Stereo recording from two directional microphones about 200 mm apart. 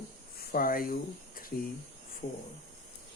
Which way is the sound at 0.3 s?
45° left (ahead or behind).